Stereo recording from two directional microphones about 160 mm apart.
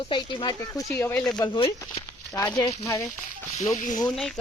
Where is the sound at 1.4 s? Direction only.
30° left (ahead or behind).